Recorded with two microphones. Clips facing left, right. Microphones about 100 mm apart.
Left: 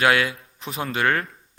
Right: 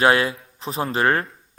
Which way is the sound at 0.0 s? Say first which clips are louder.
Right 2 dB; 35° right (ahead or behind).